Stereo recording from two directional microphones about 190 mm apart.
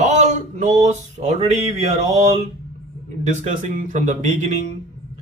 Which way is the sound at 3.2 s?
40° right (ahead or behind).